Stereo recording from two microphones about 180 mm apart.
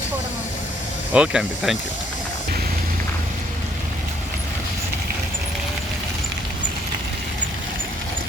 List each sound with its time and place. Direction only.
1.1 s speech: 5° right (ahead or behind)